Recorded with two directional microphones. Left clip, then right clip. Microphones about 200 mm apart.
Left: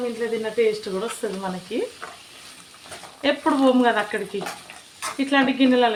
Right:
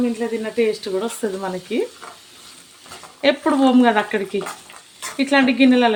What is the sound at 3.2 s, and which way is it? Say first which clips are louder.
Speech: right 3 dB; 35° right (ahead or behind).